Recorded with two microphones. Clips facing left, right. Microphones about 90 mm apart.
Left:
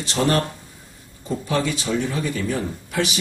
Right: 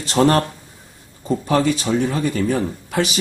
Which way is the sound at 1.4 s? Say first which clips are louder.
Right 5 dB; 45° right (ahead or behind).